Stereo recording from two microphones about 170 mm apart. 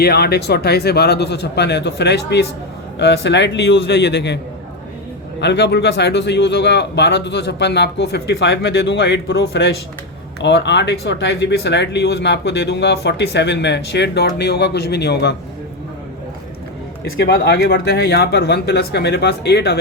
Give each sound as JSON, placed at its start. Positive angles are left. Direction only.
{"t": 0.0, "sound": "speech", "side_deg": 70}
{"t": 5.4, "sound": "speech", "side_deg": 85}
{"t": 17.0, "sound": "speech", "side_deg": 70}